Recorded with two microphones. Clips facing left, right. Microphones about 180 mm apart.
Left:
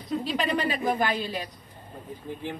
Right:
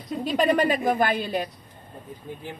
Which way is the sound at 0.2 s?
50° right (ahead or behind).